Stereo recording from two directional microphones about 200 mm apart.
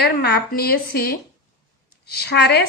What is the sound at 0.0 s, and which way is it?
A woman's voice, 50° left (ahead or behind).